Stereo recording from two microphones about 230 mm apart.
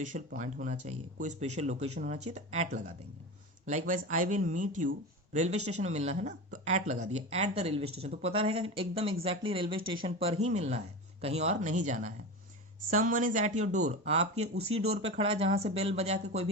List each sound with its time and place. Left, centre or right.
0.1 s speech: right